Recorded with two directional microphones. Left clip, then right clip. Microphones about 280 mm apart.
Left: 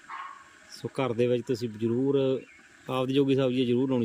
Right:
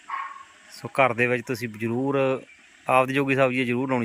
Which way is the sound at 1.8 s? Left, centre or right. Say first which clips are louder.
Right 2 dB; right.